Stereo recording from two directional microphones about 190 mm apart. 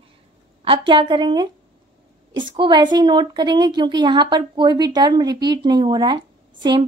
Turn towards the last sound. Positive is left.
turn(degrees=-20)  # may be behind; listen again after turning